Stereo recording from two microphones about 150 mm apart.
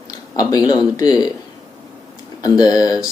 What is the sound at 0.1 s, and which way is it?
Speech, 25° left (ahead or behind).